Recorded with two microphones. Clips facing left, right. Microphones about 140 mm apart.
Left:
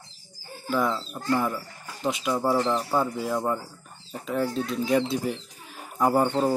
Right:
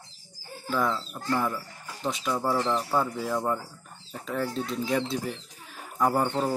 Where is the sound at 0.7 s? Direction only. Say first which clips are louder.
Left 2 dB; 10° left (ahead or behind).